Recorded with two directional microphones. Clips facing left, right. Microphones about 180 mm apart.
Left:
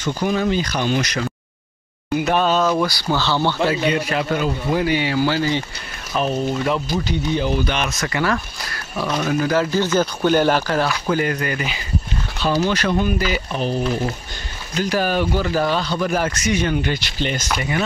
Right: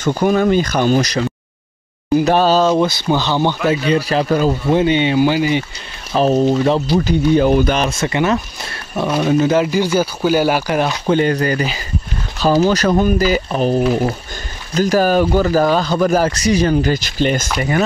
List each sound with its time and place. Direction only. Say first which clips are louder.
0.0 s speech: right 6 dB; 50° right (ahead or behind); by 3.5 s 15° right (ahead or behind)
3.9 s speech: right 6 dB; 30° right (ahead or behind)
4.6 s speech: right 5 dB; 25° right (ahead or behind)
6.1 s speech: right 7 dB; 35° right (ahead or behind)
7.1 s speech: right 9 dB; 50° right (ahead or behind)
7.7 s speech: right 6 dB; 30° right (ahead or behind)
14.8 s speech: right 6 dB; 40° right (ahead or behind)